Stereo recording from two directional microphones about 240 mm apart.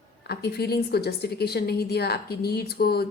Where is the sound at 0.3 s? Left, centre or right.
Left.